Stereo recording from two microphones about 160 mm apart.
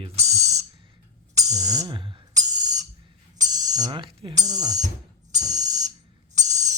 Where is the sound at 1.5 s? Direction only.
20° right (ahead or behind).